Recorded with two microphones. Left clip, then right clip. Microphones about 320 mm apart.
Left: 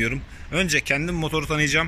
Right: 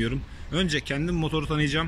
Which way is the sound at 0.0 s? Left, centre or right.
Centre.